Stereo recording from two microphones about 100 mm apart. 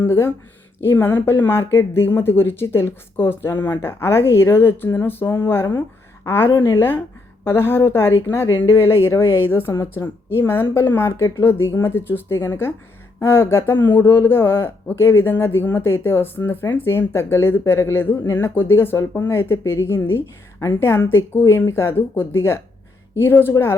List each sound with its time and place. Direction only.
0.0 s a woman's voice: 25° left (ahead or behind)